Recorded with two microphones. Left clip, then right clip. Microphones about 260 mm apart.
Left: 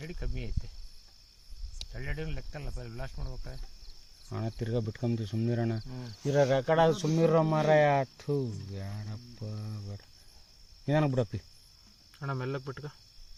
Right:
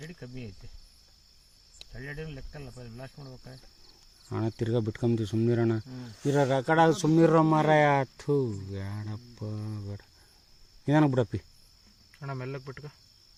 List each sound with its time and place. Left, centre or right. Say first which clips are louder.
0.0 s cricket: left 1 dB; left
1.9 s speech: even; left
4.3 s speech: right 5 dB; right
12.2 s speech: left 2 dB; centre